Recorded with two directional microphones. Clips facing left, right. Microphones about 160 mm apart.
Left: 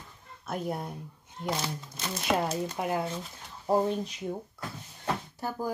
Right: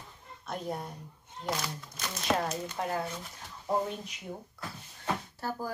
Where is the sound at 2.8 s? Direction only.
10° left (ahead or behind).